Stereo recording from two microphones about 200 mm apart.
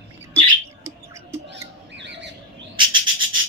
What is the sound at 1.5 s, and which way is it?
Squawk, 60° right (ahead or behind).